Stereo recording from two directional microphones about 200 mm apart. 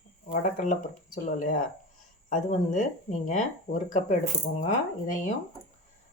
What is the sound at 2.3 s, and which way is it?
Speech, 35° left (ahead or behind).